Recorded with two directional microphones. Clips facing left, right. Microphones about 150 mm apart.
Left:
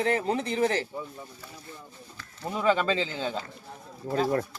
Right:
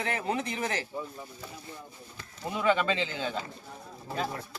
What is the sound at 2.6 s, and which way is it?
Speech, 35° left (ahead or behind).